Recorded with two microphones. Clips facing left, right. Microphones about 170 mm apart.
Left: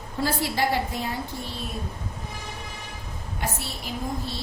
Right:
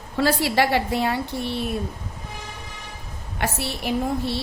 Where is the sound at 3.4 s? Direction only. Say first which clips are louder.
Right 6 dB; 70° right (ahead or behind).